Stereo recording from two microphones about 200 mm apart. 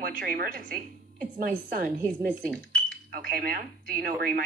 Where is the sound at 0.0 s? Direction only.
45° right (ahead or behind).